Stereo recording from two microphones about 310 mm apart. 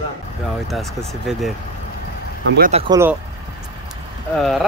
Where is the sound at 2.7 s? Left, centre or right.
Centre.